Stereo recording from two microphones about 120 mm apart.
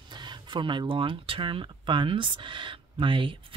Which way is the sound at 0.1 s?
40° right (ahead or behind).